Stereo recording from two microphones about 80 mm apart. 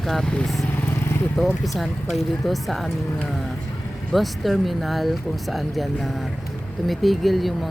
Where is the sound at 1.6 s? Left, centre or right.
Centre.